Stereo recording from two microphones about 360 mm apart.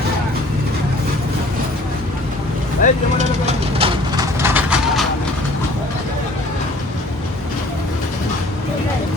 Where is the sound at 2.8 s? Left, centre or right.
Left.